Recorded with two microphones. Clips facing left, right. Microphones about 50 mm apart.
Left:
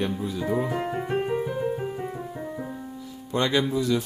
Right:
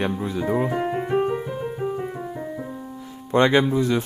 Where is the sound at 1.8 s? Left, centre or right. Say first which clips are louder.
Right 4 dB; centre.